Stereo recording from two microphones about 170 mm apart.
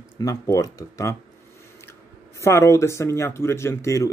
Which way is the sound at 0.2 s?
20° left (ahead or behind).